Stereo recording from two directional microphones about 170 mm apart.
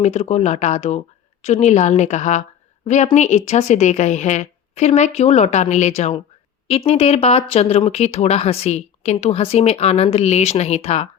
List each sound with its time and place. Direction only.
0.0 s a woman's voice: 40° left (ahead or behind)